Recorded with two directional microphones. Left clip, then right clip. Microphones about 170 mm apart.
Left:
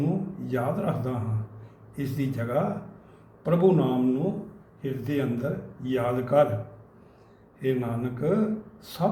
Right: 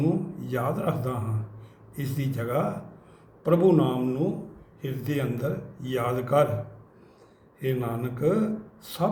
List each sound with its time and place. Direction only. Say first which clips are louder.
0.0 s a sound: right 3 dB; 15° right (ahead or behind)
2.0 s a man's voice: left 2 dB; 15° right (ahead or behind)
7.6 s a man's voice: left 1 dB; 15° right (ahead or behind)